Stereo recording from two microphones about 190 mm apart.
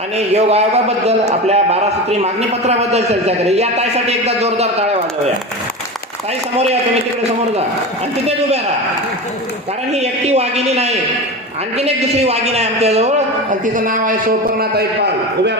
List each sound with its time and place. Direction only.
0.2 s a man's voice: 35° right (ahead or behind)
9.9 s a man's voice: 35° right (ahead or behind); by 15.5 s 60° right (ahead or behind)